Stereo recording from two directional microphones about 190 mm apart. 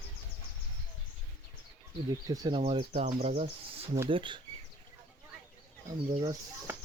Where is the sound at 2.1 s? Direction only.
20° right (ahead or behind).